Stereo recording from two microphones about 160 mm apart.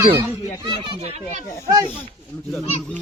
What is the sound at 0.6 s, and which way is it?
Speech, 30° right (ahead or behind).